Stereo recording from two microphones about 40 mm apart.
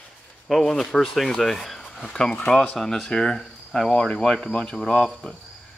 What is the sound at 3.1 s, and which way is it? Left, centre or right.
Speech, centre.